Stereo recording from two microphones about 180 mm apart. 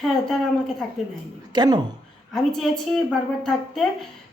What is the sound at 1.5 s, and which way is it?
Speech, 25° right (ahead or behind).